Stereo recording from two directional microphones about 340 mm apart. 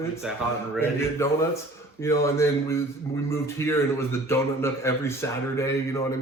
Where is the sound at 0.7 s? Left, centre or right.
Centre.